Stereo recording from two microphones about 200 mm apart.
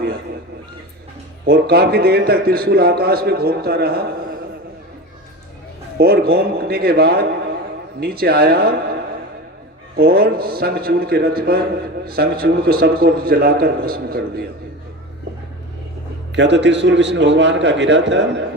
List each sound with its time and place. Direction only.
1.5 s a man's voice: 50° right (ahead or behind)
6.0 s a man's voice: 50° right (ahead or behind)
16.3 s a man's voice: 60° right (ahead or behind)